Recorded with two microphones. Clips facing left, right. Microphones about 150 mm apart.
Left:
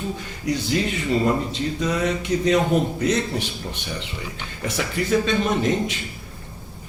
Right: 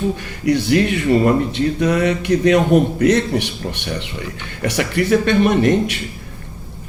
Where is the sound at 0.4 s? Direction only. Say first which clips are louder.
Right 8 dB; 65° right (ahead or behind).